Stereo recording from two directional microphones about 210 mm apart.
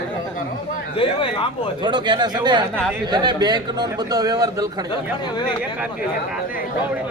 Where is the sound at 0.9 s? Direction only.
25° left (ahead or behind).